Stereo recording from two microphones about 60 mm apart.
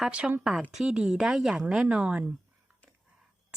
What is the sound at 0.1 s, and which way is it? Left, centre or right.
Speech, centre.